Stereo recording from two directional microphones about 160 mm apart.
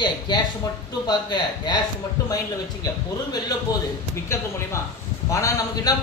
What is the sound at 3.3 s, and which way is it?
Speech, 25° left (ahead or behind).